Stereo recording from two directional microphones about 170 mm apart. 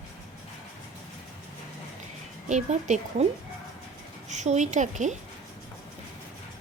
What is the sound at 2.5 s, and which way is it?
Speech, 45° right (ahead or behind).